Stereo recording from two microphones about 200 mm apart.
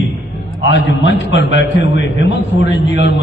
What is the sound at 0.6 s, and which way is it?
A man's voice, 65° left (ahead or behind).